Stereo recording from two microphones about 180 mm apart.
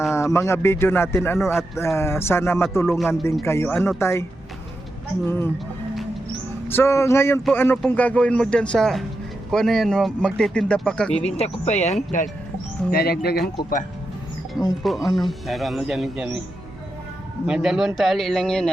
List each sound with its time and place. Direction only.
0.1 s a man's voice: 15° left (ahead or behind)
6.7 s a man's voice: 15° left (ahead or behind)
11.3 s speech: 35° left (ahead or behind)
12.9 s speech: 60° left (ahead or behind)
14.8 s speech: centre (ahead or behind)
17.4 s speech: 5° right (ahead or behind)